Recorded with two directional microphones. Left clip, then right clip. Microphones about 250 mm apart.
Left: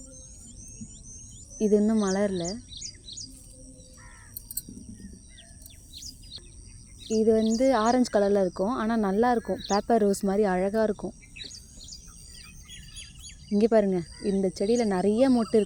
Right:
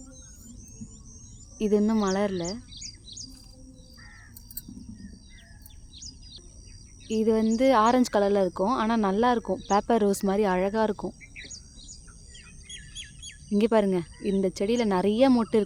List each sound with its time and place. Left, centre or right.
1.5 s speech: centre
2.4 s bird: right
7.2 s speech: centre
12.7 s bird: right
13.5 s speech: centre